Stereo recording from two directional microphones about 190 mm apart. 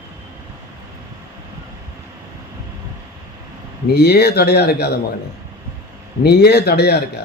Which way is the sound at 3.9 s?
55° left (ahead or behind).